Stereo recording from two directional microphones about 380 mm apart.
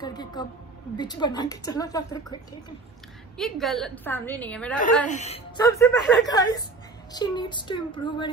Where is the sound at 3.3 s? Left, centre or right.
Centre.